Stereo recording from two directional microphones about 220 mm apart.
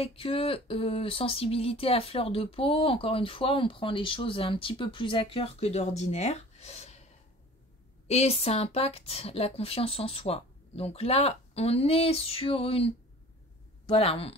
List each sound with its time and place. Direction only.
0.0 s speech: 25° left (ahead or behind)
8.1 s speech: 30° left (ahead or behind)